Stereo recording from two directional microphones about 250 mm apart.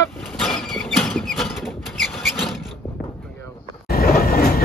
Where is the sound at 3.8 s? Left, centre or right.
Left.